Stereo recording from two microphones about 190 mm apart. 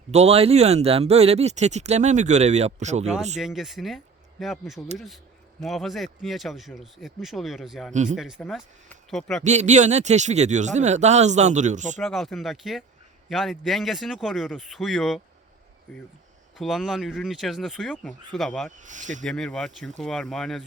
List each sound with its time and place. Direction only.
0.1 s speech: 35° right (ahead or behind)
3.3 s speech: centre (ahead or behind)
9.4 s speech: 40° right (ahead or behind)
12.0 s speech: centre (ahead or behind)
18.8 s speech: 40° right (ahead or behind)
19.2 s speech: 5° left (ahead or behind)